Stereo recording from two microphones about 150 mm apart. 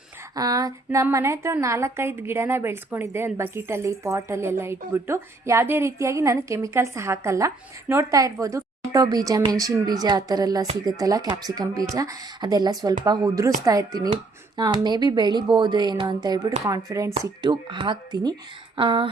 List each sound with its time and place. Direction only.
0.3 s a woman's voice: 25° right (ahead or behind)